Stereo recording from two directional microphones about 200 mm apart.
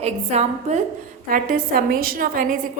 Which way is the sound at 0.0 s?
35° right (ahead or behind).